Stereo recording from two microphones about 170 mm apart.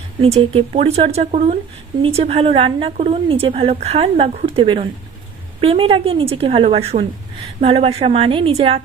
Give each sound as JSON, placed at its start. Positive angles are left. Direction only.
{"t": 0.2, "sound": "a woman's voice", "side_deg": -35}